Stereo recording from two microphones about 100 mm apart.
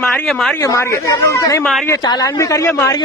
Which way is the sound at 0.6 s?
30° left (ahead or behind).